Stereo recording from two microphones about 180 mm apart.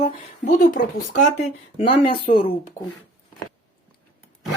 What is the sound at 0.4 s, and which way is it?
Speech, 50° left (ahead or behind).